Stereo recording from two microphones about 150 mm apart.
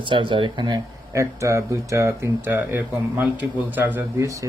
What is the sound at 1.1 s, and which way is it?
Speech, 20° right (ahead or behind).